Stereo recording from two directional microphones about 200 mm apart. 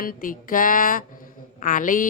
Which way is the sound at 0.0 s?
45° left (ahead or behind).